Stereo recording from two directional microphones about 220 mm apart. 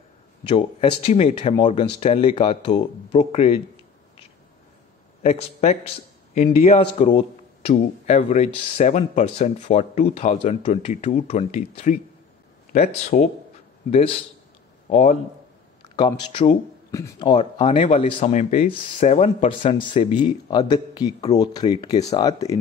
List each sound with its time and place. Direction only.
0.5 s speech: 25° left (ahead or behind)
5.2 s a man's voice: 30° left (ahead or behind)
15.8 s speech: 20° left (ahead or behind)